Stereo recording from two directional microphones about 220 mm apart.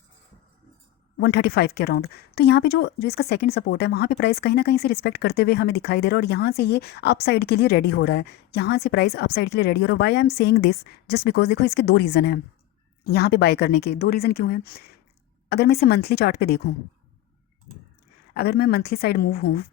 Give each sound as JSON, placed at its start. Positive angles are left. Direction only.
{"t": 1.2, "sound": "speech", "side_deg": 45}
{"t": 18.3, "sound": "speech", "side_deg": 45}